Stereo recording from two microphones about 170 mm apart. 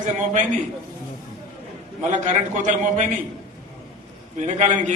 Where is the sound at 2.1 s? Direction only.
45° right (ahead or behind).